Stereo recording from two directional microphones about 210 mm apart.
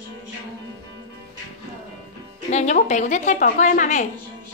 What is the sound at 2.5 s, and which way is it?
A woman's voice, 35° left (ahead or behind).